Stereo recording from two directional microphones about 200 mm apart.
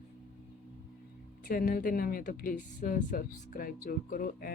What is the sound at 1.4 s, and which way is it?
Speech, 45° left (ahead or behind).